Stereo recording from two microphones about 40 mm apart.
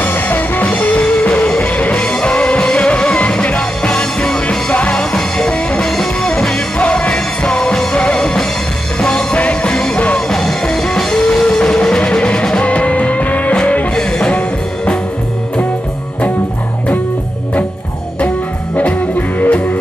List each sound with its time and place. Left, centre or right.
0.0 s music: left
0.7 s music: left; by 5.5 s centre
5.5 s music: left
6.8 s music: left
14.1 s music: left
18.8 s music: left